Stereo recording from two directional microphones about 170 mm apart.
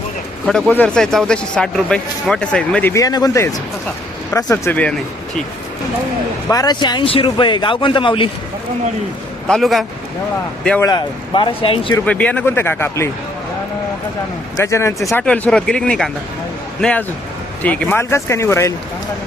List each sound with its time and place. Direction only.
0.4 s a man's voice: 5° left (ahead or behind)
2.9 s speech: 20° left (ahead or behind)
6.5 s speech: 25° left (ahead or behind)
9.5 s a man's voice: centre (ahead or behind)
10.8 s speech: 25° left (ahead or behind)
12.0 s speech: 10° left (ahead or behind)
14.6 s speech: 15° left (ahead or behind)
15.2 s a man's voice: 5° left (ahead or behind)